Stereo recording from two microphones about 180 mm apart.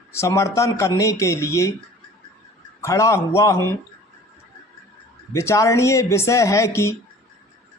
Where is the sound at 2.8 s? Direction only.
15° left (ahead or behind).